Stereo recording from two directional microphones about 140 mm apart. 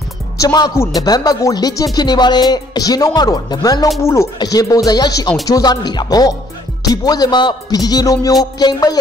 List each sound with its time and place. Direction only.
0.4 s speech: 25° left (ahead or behind)